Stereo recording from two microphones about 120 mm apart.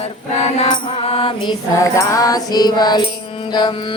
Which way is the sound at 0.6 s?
40° left (ahead or behind).